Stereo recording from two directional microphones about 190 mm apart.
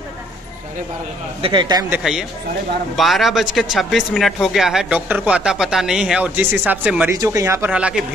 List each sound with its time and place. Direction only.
1.4 s a man's voice: 25° right (ahead or behind)
1.9 s speech: 5° right (ahead or behind)